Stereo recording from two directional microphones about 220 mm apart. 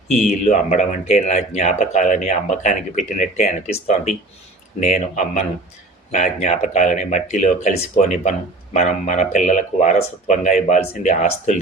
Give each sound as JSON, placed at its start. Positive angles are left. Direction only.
{"t": 0.3, "sound": "speech", "side_deg": 30}